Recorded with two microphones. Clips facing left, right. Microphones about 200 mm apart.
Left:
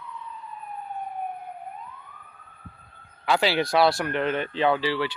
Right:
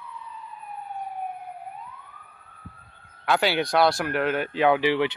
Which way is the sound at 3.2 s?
Centre (ahead or behind).